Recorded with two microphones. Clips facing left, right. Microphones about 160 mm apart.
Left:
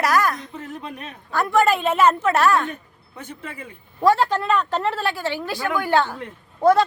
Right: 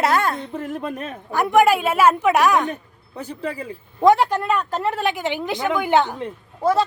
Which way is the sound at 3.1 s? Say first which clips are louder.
Right 7 dB; 35° right (ahead or behind).